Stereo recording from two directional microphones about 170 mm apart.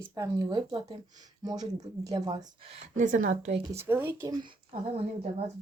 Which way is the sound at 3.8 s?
10° right (ahead or behind).